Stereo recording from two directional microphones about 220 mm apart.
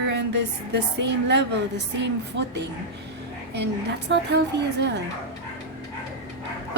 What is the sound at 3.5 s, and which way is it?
Speech, 50° right (ahead or behind).